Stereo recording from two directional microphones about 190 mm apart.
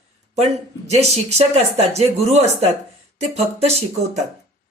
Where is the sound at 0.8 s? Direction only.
35° right (ahead or behind).